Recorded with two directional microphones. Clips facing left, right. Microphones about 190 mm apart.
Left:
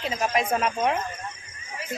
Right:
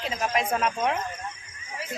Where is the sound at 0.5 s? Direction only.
10° left (ahead or behind).